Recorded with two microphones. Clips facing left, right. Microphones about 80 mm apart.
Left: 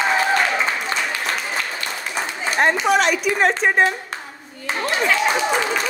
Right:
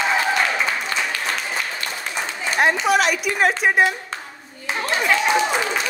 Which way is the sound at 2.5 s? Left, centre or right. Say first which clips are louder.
Left 1 dB; centre.